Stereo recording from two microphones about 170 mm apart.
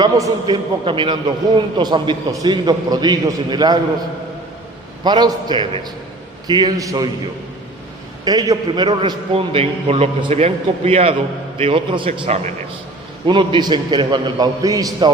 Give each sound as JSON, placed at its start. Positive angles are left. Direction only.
{"t": 0.0, "sound": "a man's voice", "side_deg": -25}
{"t": 5.0, "sound": "a man's voice", "side_deg": -25}
{"t": 8.2, "sound": "a man's voice", "side_deg": -20}